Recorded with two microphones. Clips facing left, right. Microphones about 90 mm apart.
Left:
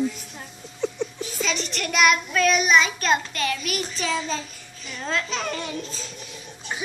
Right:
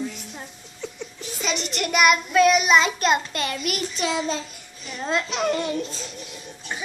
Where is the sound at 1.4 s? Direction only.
15° right (ahead or behind).